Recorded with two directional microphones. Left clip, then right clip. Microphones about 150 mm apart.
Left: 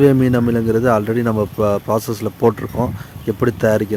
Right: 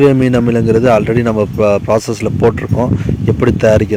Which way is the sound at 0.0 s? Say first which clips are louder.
Right 4 dB; 15° right (ahead or behind).